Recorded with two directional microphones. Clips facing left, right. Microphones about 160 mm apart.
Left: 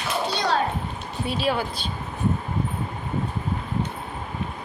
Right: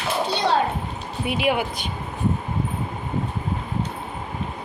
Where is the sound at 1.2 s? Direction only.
15° right (ahead or behind).